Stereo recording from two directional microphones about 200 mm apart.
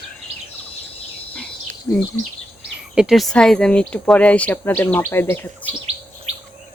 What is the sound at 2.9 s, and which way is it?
A woman's voice, centre (ahead or behind).